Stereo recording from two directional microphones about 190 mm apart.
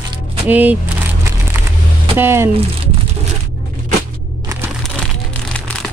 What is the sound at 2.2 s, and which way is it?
Speech, 15° right (ahead or behind).